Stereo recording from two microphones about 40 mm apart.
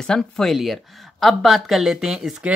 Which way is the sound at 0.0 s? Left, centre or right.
Centre.